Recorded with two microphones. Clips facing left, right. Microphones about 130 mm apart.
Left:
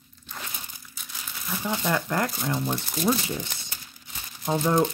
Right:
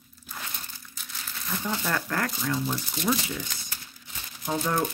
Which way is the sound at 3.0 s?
30° left (ahead or behind).